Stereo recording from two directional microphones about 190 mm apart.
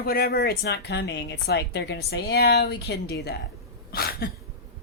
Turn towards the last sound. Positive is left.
turn(degrees=55)  # may be behind; listen again after turning